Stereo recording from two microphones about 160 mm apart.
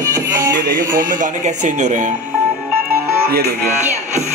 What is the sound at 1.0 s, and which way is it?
Music, 55° right (ahead or behind).